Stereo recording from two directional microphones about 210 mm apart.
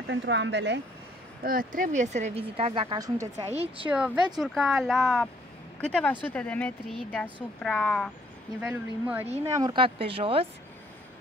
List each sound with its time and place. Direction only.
0.1 s speech: 60° right (ahead or behind)
1.4 s speech: 45° right (ahead or behind); by 3.4 s 15° right (ahead or behind)
3.4 s speech: 30° right (ahead or behind)
3.9 s speech: 5° right (ahead or behind)
9.5 s speech: 20° right (ahead or behind)